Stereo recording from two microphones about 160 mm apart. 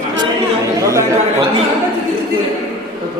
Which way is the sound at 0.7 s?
20° right (ahead or behind).